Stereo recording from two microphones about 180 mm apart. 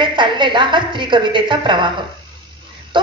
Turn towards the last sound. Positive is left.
turn(degrees=-25)  # may be behind; listen again after turning